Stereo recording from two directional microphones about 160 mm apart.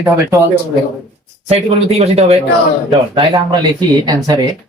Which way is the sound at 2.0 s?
45° right (ahead or behind).